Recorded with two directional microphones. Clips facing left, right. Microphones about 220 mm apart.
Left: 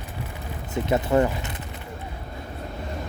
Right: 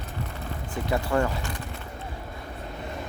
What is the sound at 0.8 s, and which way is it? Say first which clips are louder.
Speech: left 4 dB; 20° left (ahead or behind).